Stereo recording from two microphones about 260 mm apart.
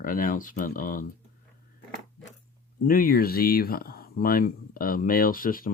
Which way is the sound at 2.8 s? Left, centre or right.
Left.